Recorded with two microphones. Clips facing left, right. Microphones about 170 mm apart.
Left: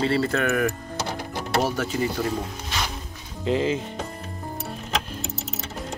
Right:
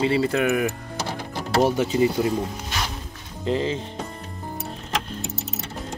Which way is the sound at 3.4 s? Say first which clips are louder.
Left 1 dB; 5° left (ahead or behind).